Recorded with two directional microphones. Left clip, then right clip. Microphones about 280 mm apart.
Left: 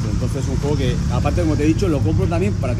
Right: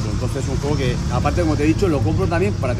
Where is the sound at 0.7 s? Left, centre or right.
Centre.